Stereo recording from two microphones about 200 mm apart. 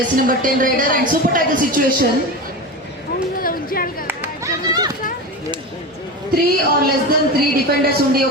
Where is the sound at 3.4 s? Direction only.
45° left (ahead or behind).